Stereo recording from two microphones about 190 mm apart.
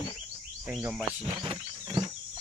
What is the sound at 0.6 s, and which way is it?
Speech, 5° right (ahead or behind).